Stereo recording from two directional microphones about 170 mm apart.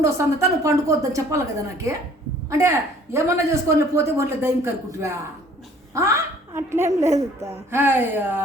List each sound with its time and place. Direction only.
0.0 s a woman's voice: 15° right (ahead or behind)